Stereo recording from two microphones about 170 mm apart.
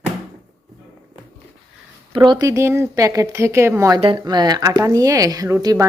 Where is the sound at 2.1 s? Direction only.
25° right (ahead or behind).